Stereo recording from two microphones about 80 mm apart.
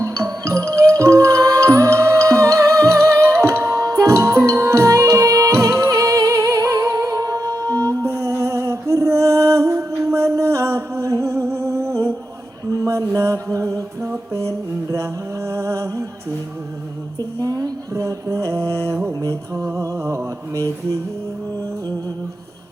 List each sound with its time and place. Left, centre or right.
0.0 s music: right
17.2 s music: right
19.2 s mantra: right